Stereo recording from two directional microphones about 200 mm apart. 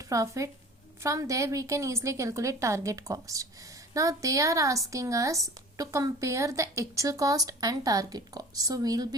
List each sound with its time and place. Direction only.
0.0 s speech: 15° right (ahead or behind)